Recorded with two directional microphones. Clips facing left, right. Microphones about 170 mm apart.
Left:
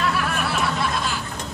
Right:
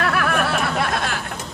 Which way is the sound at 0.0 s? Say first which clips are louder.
Right 3 dB; 70° right (ahead or behind).